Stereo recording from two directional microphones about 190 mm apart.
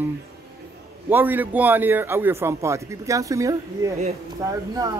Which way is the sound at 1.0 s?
10° right (ahead or behind).